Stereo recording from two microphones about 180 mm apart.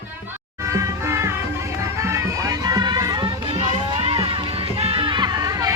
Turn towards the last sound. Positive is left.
turn(degrees=-20)  # may be behind; listen again after turning